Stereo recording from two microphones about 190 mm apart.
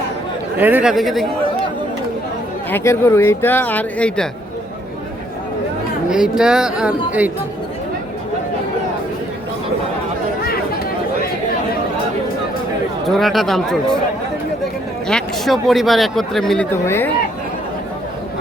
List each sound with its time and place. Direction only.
0.5 s speech: 10° right (ahead or behind)
2.6 s speech: 10° left (ahead or behind)
6.1 s speech: 5° right (ahead or behind)
13.1 s speech: centre (ahead or behind)
15.0 s speech: centre (ahead or behind)
16.7 s speech: 15° left (ahead or behind)